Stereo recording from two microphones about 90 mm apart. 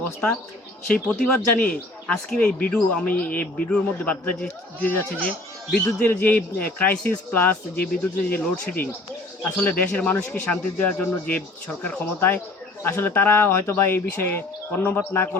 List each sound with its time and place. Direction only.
0.9 s speech: 5° left (ahead or behind); by 15.3 s 25° left (ahead or behind)